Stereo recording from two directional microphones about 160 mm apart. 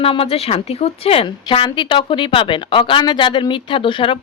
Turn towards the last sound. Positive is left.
turn(degrees=30)  # may be behind; listen again after turning